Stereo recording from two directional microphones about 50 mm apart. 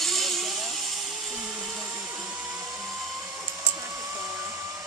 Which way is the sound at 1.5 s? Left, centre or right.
Right.